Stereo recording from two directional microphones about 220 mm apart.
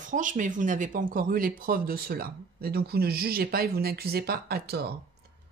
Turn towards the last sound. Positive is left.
turn(degrees=-45)  # may be behind; listen again after turning